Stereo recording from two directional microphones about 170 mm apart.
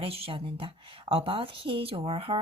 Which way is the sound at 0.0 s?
35° right (ahead or behind).